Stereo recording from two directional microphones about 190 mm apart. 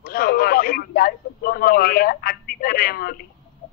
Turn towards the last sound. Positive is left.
turn(degrees=55)  # may be behind; listen again after turning